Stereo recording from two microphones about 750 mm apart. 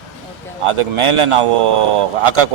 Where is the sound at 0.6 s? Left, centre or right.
Right.